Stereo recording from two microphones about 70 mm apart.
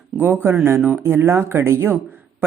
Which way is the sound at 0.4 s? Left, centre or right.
Right.